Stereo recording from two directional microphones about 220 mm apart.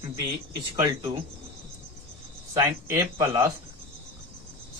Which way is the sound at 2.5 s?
15° right (ahead or behind).